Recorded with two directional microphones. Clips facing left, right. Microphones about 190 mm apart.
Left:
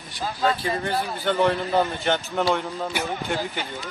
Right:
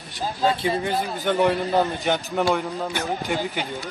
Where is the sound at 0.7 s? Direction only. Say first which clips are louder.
Right 2 dB; 15° right (ahead or behind).